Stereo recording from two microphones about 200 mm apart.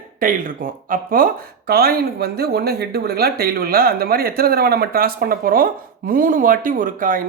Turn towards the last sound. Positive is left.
turn(degrees=-45)  # may be behind; listen again after turning